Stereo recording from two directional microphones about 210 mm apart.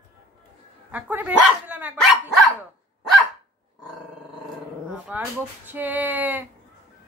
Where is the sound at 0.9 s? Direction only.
10° right (ahead or behind).